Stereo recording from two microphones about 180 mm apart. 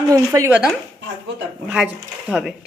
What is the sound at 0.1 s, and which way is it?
Speech, 20° right (ahead or behind).